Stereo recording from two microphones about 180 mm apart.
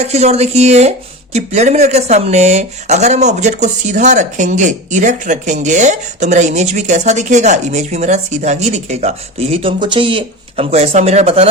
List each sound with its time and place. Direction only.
0.0 s speech: 35° right (ahead or behind)